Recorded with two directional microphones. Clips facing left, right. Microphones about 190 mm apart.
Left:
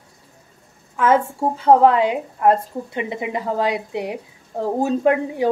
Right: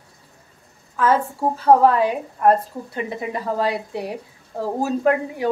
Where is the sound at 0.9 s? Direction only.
20° left (ahead or behind).